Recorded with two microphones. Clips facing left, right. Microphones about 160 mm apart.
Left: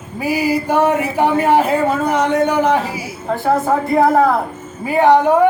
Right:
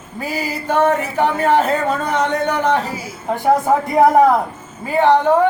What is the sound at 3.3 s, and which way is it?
Speech, 15° right (ahead or behind).